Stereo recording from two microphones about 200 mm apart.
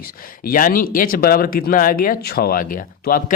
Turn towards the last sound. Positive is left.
turn(degrees=45)  # may be behind; listen again after turning